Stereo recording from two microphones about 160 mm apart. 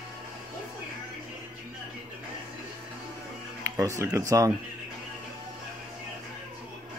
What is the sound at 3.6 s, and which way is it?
Speech, 20° right (ahead or behind).